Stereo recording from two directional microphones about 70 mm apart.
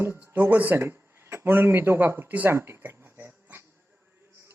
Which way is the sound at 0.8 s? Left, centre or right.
Right.